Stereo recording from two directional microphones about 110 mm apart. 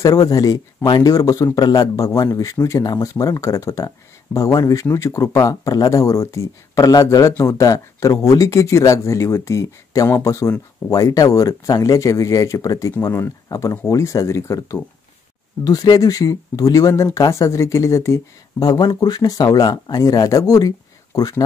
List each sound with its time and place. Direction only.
0.0 s speech: 35° left (ahead or behind)